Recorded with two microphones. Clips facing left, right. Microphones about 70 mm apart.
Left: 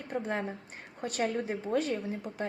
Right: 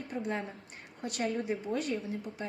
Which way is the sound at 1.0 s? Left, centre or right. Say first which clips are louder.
Left 2 dB; left.